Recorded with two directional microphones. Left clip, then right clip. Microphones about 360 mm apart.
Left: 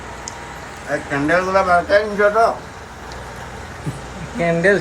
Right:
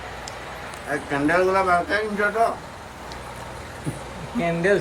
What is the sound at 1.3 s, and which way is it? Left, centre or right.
Speech, centre.